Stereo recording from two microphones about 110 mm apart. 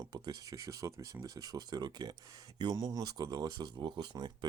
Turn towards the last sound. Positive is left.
turn(degrees=-40)  # may be behind; listen again after turning